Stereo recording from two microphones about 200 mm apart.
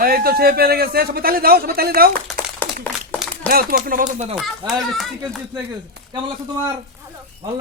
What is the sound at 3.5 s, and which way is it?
Speech, 45° right (ahead or behind).